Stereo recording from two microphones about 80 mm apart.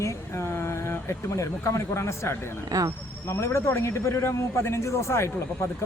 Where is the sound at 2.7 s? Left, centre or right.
Right.